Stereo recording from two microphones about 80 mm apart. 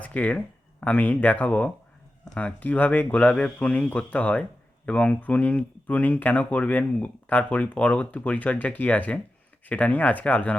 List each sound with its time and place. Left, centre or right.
0.0 s speech: centre